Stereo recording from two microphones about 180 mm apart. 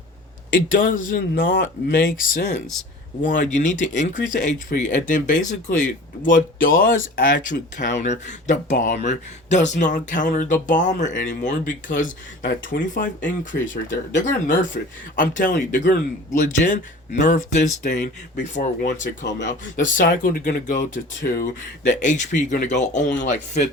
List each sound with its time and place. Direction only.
0.7 s speech: 50° left (ahead or behind)
19.2 s speech: 80° left
19.5 s speech: 45° left (ahead or behind)